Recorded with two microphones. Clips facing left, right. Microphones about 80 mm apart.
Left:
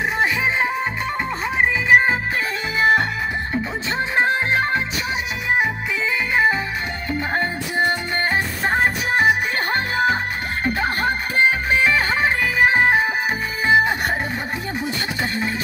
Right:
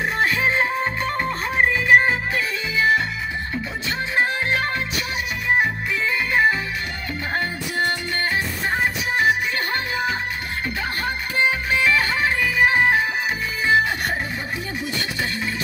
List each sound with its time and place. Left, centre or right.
1.9 s music: centre
2.8 s music: left
4.2 s music: left
7.1 s music: left
8.6 s music: left